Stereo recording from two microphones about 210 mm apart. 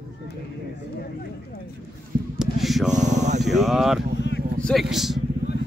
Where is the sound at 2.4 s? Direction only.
Centre (ahead or behind).